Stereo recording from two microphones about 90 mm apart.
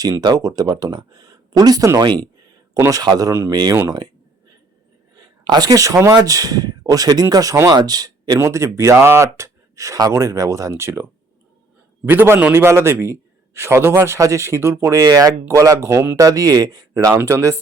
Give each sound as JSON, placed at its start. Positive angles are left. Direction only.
{"t": 0.0, "sound": "a man's voice", "side_deg": -45}
{"t": 3.5, "sound": "speech", "side_deg": -50}
{"t": 5.1, "sound": "a sound", "side_deg": -45}
{"t": 6.1, "sound": "speech", "side_deg": -45}
{"t": 7.7, "sound": "speech", "side_deg": -50}
{"t": 8.4, "sound": "a man's voice", "side_deg": -35}
{"t": 12.0, "sound": "a man's voice", "side_deg": -25}
{"t": 17.2, "sound": "a man's voice", "side_deg": -30}